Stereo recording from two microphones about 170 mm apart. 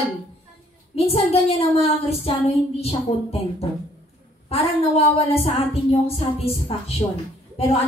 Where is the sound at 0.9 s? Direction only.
35° left (ahead or behind).